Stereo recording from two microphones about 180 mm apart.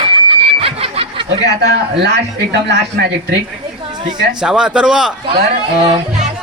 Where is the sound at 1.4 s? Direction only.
70° right (ahead or behind).